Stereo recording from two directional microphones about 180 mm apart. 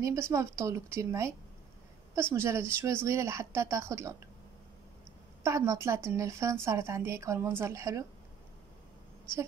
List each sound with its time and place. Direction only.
0.0 s speech: 15° right (ahead or behind)
2.3 s speech: 15° right (ahead or behind)
5.4 s speech: 15° right (ahead or behind)